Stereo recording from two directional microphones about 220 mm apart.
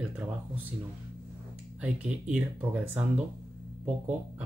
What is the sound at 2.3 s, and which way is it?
Speech, 5° right (ahead or behind).